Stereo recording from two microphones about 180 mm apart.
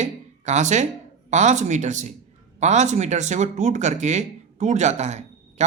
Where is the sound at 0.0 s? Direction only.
40° right (ahead or behind).